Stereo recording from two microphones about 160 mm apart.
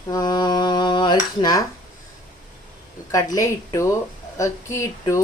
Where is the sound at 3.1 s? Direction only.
20° left (ahead or behind).